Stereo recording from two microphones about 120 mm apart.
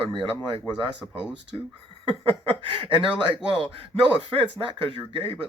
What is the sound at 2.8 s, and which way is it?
Speech, 40° right (ahead or behind).